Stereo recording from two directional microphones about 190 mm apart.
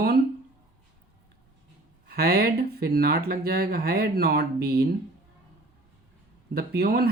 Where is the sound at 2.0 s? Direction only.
55° right (ahead or behind).